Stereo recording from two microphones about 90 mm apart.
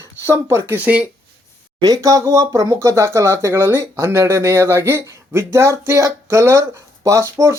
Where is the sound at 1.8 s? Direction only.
45° right (ahead or behind).